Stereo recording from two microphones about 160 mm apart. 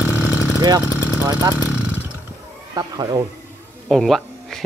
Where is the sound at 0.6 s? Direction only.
25° right (ahead or behind).